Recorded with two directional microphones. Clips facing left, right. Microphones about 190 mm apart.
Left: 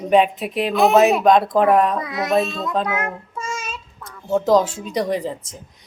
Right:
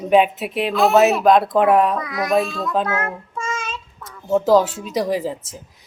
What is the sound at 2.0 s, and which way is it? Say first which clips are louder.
A child's voice: even; 25° left (ahead or behind).